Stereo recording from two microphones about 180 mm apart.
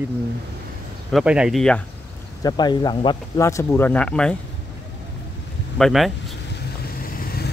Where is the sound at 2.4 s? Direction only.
25° left (ahead or behind); by 4.4 s 5° left (ahead or behind).